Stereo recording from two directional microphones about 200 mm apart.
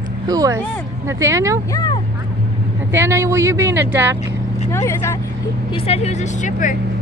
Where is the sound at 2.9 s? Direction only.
10° right (ahead or behind).